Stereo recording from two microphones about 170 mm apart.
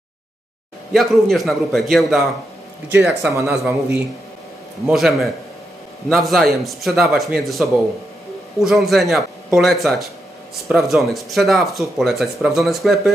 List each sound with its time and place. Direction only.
0.9 s speech: centre (ahead or behind)
3.3 s speech: 15° right (ahead or behind)
4.8 s speech: centre (ahead or behind)
8.6 s speech: centre (ahead or behind)